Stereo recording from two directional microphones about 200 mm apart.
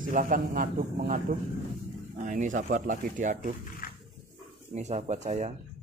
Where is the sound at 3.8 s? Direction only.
45° left (ahead or behind).